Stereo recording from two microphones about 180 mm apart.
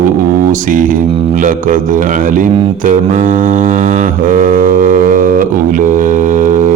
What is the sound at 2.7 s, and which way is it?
Mantra, 45° right (ahead or behind).